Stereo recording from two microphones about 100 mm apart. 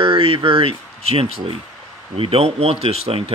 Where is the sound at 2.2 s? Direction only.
85° right.